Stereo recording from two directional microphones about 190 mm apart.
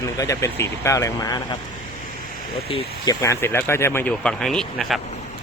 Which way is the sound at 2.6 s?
25° left (ahead or behind).